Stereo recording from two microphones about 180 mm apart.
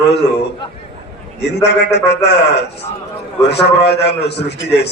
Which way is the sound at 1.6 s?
70° left (ahead or behind).